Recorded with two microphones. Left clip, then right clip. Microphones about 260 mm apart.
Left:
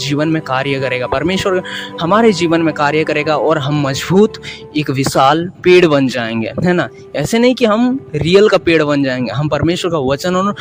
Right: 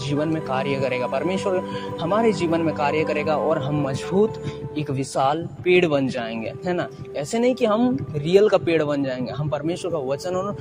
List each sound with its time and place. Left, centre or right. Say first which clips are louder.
0.0 s speech: left 8 dB; left